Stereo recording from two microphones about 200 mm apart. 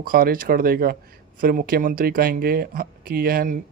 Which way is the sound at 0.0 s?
45° right (ahead or behind).